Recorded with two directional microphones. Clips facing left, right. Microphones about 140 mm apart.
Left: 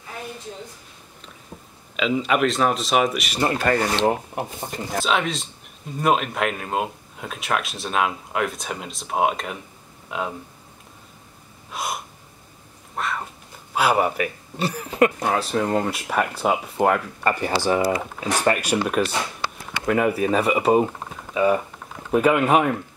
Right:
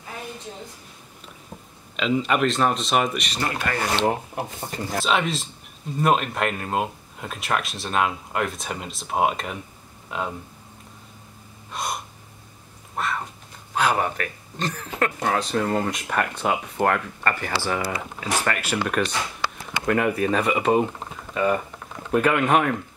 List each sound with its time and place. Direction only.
2.0 s speech: centre (ahead or behind)
3.3 s speech: 30° left (ahead or behind)
4.6 s speech: 15° left (ahead or behind)
4.9 s speech: centre (ahead or behind)
11.7 s gasp: centre (ahead or behind)
12.9 s cat: centre (ahead or behind)
13.7 s speech: 10° left (ahead or behind)
15.1 s speech: 5° left (ahead or behind); by 17.9 s 25° left (ahead or behind)
18.5 s speech: 15° left (ahead or behind)